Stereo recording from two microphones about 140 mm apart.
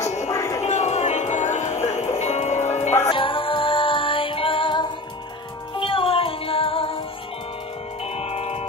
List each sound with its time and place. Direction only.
0.3 s a sound: 25° left (ahead or behind)
0.6 s music: 55° left (ahead or behind)
3.1 s music: 40° left (ahead or behind)
8.2 s music: 45° left (ahead or behind)